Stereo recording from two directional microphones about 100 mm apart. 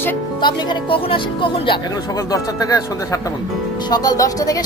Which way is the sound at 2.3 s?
35° left (ahead or behind).